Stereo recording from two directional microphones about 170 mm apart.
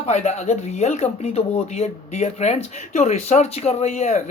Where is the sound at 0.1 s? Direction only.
40° left (ahead or behind).